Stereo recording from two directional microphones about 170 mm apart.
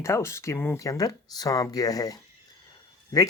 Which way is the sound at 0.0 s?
15° left (ahead or behind).